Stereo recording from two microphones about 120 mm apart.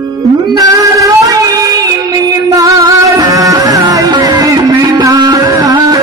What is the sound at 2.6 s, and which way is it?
Music, 30° right (ahead or behind).